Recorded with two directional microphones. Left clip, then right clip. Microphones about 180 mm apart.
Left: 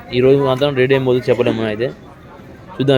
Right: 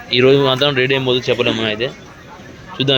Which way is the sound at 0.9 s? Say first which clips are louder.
Left 2 dB; 20° left (ahead or behind).